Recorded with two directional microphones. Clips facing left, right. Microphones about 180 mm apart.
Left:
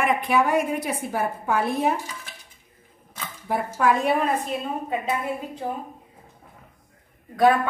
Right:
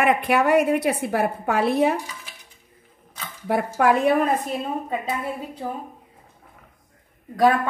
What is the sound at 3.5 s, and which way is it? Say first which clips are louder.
Speech: right 3 dB; 65° right (ahead or behind).